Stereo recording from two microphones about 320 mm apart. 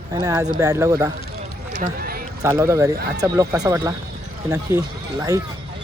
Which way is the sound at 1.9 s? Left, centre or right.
Right.